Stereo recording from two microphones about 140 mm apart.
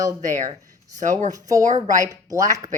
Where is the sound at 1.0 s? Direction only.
60° right (ahead or behind).